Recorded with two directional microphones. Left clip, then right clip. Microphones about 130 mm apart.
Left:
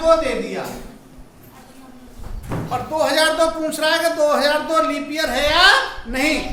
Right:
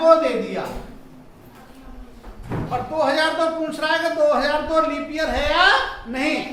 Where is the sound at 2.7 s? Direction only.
55° left (ahead or behind).